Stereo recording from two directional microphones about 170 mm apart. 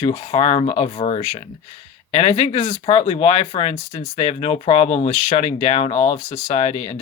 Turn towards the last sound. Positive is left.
turn(degrees=40)  # may be behind; listen again after turning